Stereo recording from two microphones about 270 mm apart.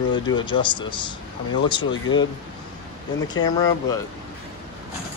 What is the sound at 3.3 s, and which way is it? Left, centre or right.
Speech, centre.